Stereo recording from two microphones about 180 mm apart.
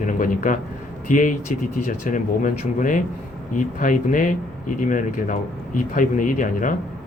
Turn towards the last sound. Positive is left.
turn(degrees=45)  # may be behind; listen again after turning